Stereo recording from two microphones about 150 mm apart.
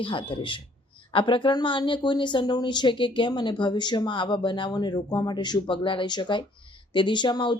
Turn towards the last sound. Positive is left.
turn(degrees=30)  # may be behind; listen again after turning